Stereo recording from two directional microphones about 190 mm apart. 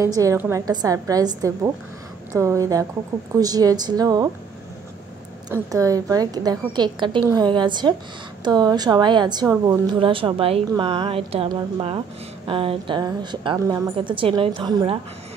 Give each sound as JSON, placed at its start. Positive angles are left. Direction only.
{"t": 0.0, "sound": "a woman's voice", "side_deg": -15}
{"t": 5.5, "sound": "a woman's voice", "side_deg": -15}